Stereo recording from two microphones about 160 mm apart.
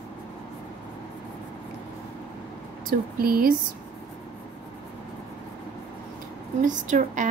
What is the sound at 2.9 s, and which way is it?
Speech, 65° right (ahead or behind).